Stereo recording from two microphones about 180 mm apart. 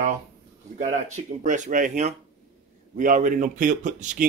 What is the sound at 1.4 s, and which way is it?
Speech, 45° right (ahead or behind).